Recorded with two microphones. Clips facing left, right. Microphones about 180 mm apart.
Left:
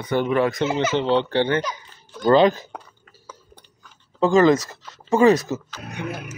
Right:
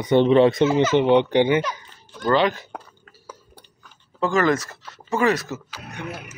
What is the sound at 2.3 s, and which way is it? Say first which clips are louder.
Speech: left 4 dB; 35° left (ahead or behind).